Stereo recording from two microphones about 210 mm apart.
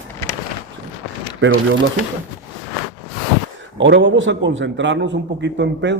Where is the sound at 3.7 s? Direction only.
60° right (ahead or behind).